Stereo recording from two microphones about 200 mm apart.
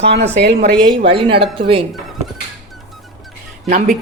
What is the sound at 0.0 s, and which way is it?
Speech, 55° right (ahead or behind).